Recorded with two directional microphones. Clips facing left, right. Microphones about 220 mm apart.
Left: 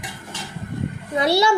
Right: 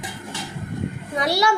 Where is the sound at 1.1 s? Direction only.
25° left (ahead or behind).